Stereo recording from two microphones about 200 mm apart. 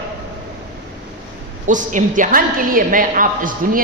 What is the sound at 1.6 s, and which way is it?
A woman's voice, 40° right (ahead or behind).